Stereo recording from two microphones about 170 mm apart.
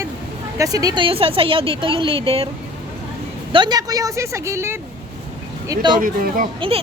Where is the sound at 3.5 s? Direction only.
25° right (ahead or behind).